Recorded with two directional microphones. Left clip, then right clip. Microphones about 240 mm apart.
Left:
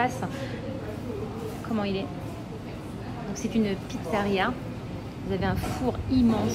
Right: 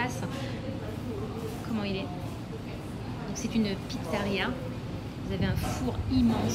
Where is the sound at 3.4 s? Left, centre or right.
Centre.